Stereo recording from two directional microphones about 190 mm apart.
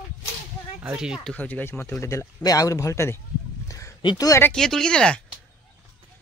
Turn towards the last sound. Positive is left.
turn(degrees=5)  # may be behind; listen again after turning